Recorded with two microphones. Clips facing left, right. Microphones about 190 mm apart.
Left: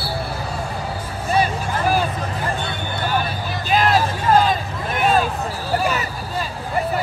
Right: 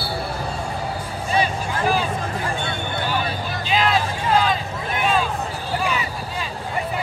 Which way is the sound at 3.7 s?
45° left (ahead or behind).